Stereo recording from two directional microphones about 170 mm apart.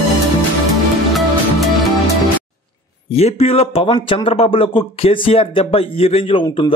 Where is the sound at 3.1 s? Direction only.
35° left (ahead or behind).